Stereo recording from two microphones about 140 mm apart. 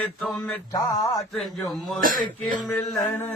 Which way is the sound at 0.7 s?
25° left (ahead or behind).